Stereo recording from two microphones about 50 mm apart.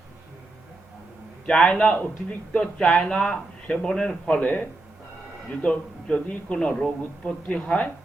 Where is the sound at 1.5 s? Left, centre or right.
Centre.